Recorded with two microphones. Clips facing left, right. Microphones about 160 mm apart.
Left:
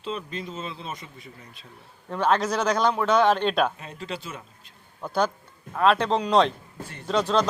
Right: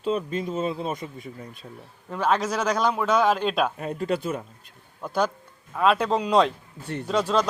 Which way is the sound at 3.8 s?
50° right (ahead or behind).